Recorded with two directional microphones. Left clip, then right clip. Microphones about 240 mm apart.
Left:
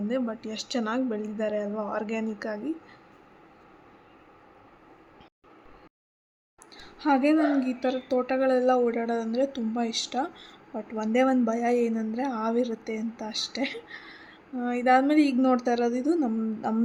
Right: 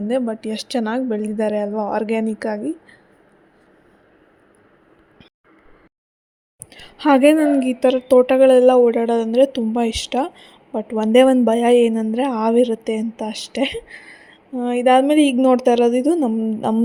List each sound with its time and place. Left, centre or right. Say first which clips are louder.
0.1 s a woman's voice: right 11 dB; right
6.7 s a woman's voice: right 10 dB; right